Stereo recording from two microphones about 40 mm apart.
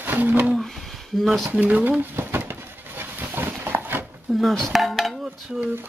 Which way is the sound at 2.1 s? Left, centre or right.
Right.